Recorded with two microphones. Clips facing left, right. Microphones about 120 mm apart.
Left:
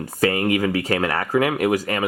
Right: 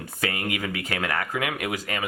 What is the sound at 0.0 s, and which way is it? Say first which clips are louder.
Speech: left 9 dB; 40° left (ahead or behind).